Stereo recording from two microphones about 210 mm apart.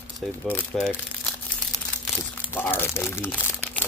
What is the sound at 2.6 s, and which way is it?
Speech, 10° left (ahead or behind).